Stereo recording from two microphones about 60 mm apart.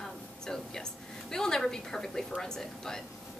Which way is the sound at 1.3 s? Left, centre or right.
Centre.